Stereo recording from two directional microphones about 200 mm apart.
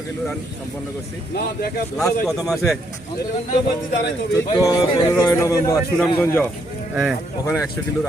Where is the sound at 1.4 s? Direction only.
50° left (ahead or behind).